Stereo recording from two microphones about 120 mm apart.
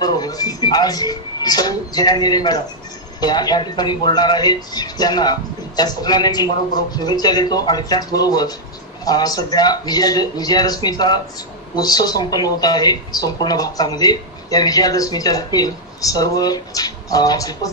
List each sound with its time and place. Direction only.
0.0 s a woman's voice: 30° left (ahead or behind)